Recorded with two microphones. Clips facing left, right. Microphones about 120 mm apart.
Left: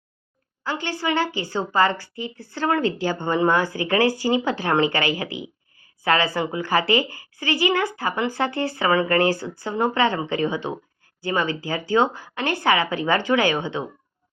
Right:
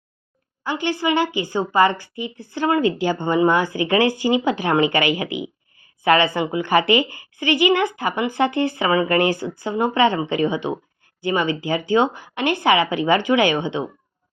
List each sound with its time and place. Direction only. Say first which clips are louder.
0.6 s a woman's voice: right 4 dB; 15° right (ahead or behind)